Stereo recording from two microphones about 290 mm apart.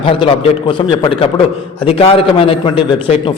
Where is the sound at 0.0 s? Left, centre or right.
Centre.